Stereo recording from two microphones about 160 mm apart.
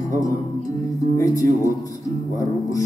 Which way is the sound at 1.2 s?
20° left (ahead or behind).